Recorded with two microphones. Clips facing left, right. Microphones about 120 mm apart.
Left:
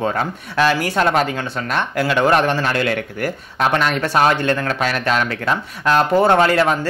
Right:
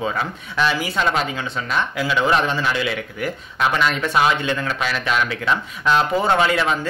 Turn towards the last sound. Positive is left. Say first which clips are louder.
# left 4 dB
turn(degrees=50)  # may be behind; listen again after turning